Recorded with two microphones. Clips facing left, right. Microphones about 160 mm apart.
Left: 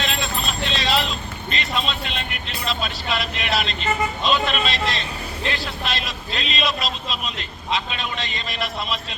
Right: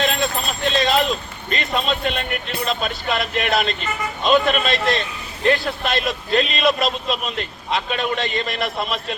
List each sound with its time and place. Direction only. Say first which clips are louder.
0.0 s a man's voice: right 5 dB; 50° right (ahead or behind)